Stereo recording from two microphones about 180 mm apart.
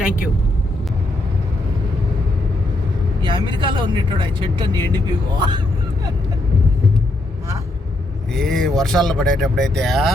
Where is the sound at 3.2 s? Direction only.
25° right (ahead or behind).